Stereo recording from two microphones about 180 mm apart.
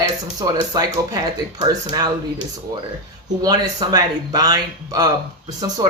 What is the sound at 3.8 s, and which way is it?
Speech, 20° right (ahead or behind).